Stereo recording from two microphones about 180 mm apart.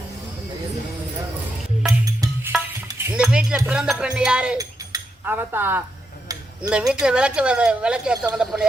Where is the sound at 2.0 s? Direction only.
20° right (ahead or behind).